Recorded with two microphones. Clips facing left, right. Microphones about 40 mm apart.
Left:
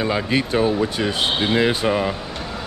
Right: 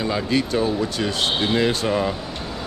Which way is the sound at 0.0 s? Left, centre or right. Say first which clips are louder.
Left 1 dB; left.